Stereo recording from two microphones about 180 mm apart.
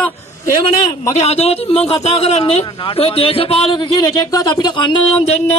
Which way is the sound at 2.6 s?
25° left (ahead or behind).